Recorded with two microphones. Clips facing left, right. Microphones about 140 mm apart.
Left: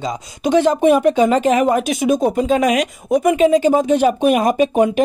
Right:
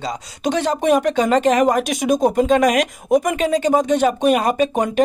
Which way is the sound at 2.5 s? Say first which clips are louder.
Even; 5° left (ahead or behind).